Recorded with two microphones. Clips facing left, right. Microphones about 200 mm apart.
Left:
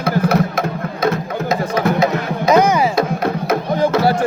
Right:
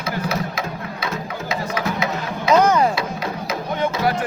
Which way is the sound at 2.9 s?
55° left (ahead or behind).